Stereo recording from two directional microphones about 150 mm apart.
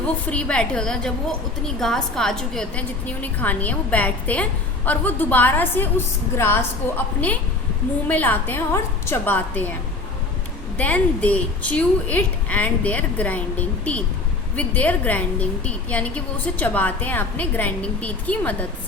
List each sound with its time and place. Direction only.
0.3 s a woman's voice: 10° left (ahead or behind)
10.8 s a woman's voice: 10° left (ahead or behind)